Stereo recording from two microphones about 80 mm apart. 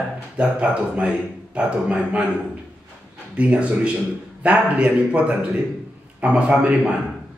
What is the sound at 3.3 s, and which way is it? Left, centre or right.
A man's voice, centre.